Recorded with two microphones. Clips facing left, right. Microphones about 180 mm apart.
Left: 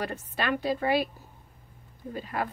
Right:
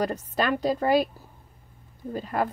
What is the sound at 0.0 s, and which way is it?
A woman's voice, 40° right (ahead or behind).